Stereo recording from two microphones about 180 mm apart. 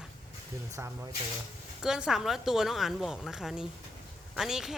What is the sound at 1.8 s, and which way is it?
A man's voice, 5° right (ahead or behind).